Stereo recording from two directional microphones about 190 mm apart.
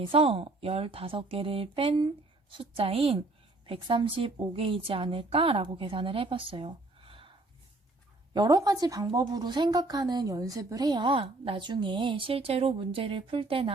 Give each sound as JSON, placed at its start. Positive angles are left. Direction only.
{"t": 0.0, "sound": "a woman's voice", "side_deg": -30}